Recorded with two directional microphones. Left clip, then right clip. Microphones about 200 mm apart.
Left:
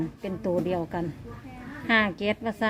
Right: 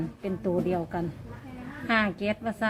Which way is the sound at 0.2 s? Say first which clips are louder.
Even; 20° left (ahead or behind).